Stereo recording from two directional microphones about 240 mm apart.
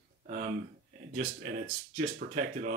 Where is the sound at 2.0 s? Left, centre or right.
Right.